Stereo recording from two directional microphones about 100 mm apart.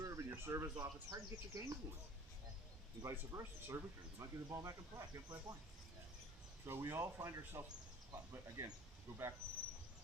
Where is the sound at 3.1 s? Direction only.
25° right (ahead or behind).